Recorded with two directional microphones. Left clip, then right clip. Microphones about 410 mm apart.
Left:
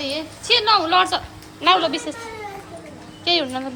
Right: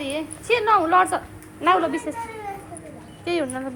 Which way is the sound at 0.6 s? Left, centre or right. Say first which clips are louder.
Right 1 dB; centre.